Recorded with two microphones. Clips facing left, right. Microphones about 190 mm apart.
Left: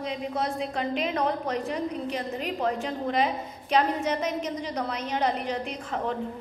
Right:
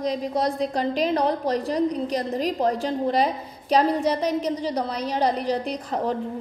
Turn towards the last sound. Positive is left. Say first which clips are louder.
# right 5 dB
turn(degrees=-35)  # may be behind; listen again after turning